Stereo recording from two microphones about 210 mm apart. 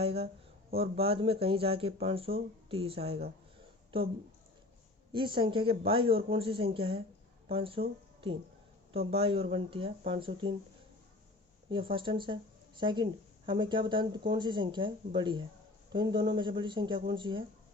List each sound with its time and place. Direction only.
0.0 s speech: 30° right (ahead or behind)
5.1 s speech: 25° right (ahead or behind)
11.7 s speech: 25° right (ahead or behind)